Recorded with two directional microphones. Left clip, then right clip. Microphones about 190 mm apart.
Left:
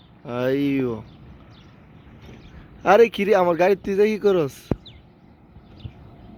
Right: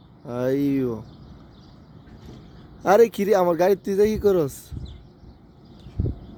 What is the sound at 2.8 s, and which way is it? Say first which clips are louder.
A man's voice: left 2 dB; 10° right (ahead or behind).